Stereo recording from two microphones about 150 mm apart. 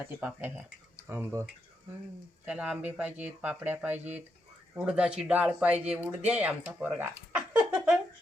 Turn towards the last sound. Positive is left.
turn(degrees=-5)  # may be behind; listen again after turning